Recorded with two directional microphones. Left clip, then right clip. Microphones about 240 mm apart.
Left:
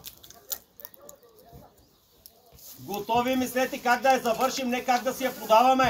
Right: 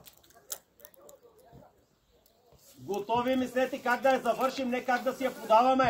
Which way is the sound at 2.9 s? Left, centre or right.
Left.